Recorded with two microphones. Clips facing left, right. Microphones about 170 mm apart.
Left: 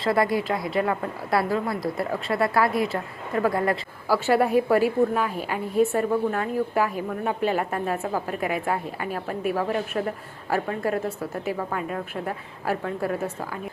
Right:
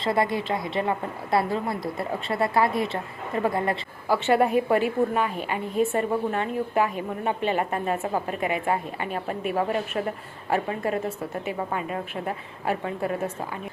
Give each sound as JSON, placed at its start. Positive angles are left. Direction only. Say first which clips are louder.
{"t": 0.0, "sound": "speech", "louder": "left 2 dB", "side_deg": -20}
{"t": 0.3, "sound": "a woman's voice", "louder": "left 3 dB", "side_deg": 5}
{"t": 0.8, "sound": "speech", "louder": "left 2 dB", "side_deg": -20}
{"t": 4.1, "sound": "a woman's voice", "louder": "left 1 dB", "side_deg": 0}